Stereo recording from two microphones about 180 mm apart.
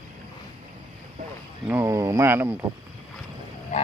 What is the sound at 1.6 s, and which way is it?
Speech, 15° right (ahead or behind).